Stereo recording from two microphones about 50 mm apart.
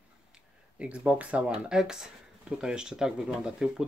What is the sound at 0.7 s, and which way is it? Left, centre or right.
Speech, right.